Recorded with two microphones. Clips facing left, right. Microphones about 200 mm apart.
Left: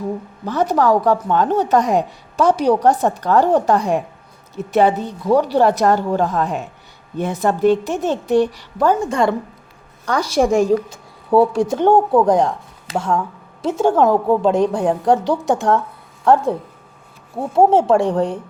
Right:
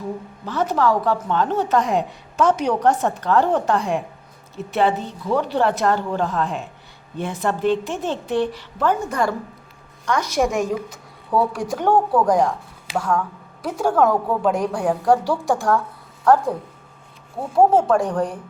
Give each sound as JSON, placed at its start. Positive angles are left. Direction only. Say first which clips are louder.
{"t": 0.4, "sound": "a woman's voice", "louder": "left 4 dB", "side_deg": 40}
{"t": 8.9, "sound": "a woman's voice", "louder": "left 4 dB", "side_deg": 25}